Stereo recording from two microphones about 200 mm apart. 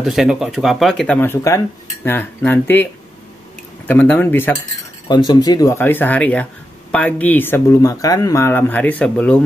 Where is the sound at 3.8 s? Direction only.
10° left (ahead or behind).